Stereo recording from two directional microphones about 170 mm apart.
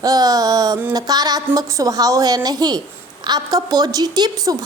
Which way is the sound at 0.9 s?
20° right (ahead or behind).